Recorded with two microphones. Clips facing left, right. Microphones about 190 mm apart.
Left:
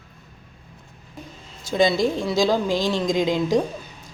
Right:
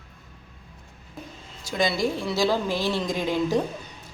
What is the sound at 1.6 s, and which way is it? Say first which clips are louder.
A woman's voice: left 5 dB; 25° left (ahead or behind).